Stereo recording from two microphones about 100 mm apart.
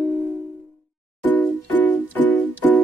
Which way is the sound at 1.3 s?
15° left (ahead or behind).